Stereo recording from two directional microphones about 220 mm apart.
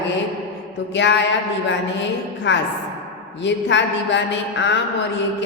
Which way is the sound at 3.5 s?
55° left (ahead or behind).